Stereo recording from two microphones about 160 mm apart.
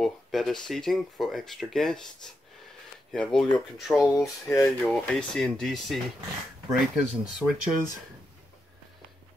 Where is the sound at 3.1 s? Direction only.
5° left (ahead or behind).